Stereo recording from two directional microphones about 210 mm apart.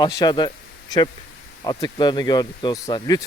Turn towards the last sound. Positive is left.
turn(degrees=20)  # may be behind; listen again after turning